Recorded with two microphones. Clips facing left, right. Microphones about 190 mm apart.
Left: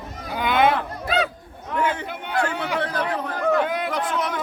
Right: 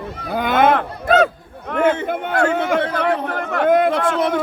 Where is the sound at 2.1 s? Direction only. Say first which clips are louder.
Right 7 dB; 50° right (ahead or behind).